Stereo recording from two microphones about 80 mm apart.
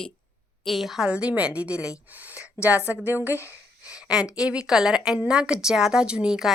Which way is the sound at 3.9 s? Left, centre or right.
Centre.